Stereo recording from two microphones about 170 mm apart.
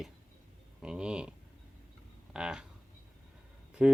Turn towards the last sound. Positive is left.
turn(degrees=-5)  # may be behind; listen again after turning